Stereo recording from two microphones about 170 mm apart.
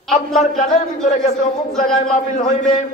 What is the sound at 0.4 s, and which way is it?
Speech, 45° left (ahead or behind).